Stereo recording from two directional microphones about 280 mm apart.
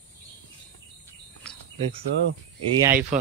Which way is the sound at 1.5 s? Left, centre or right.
Centre.